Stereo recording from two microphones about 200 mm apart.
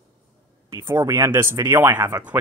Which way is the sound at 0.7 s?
15° right (ahead or behind).